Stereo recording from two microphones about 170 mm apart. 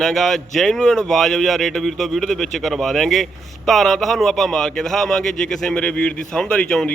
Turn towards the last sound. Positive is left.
turn(degrees=5)  # may be behind; listen again after turning